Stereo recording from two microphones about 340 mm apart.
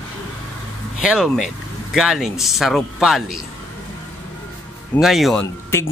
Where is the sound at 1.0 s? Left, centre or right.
Centre.